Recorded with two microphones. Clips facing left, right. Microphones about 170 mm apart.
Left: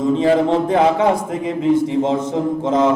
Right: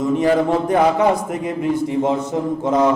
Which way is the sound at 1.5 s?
25° left (ahead or behind).